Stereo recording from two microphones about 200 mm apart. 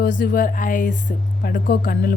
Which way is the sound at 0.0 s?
45° left (ahead or behind).